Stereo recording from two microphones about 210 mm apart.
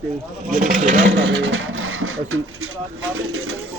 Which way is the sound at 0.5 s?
40° right (ahead or behind).